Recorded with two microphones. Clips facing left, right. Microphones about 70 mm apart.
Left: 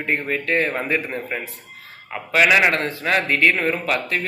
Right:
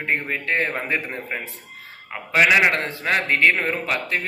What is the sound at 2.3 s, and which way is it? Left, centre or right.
A man's voice, right.